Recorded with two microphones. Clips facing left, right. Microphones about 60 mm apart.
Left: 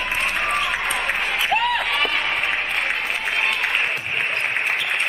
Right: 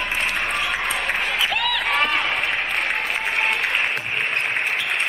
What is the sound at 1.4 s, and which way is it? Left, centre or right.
Applause, left.